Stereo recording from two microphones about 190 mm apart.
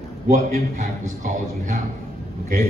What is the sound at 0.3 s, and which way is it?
A man's voice, 40° right (ahead or behind).